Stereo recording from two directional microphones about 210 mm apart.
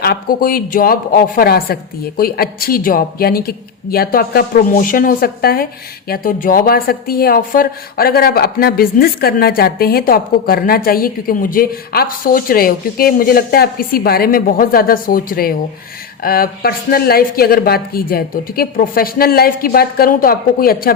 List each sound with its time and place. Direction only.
0.0 s a woman's voice: 45° left (ahead or behind)